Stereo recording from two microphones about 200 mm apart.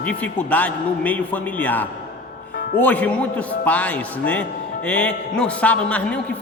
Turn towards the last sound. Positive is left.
turn(degrees=5)  # may be behind; listen again after turning